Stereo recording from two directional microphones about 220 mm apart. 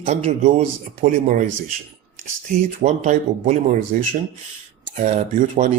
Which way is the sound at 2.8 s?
30° right (ahead or behind).